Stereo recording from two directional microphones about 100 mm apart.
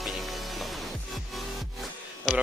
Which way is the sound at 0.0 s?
Centre (ahead or behind).